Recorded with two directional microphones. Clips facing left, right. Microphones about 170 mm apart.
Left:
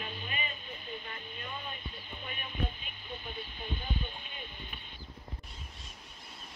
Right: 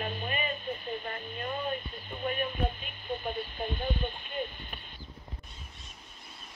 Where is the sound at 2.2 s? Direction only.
50° right (ahead or behind).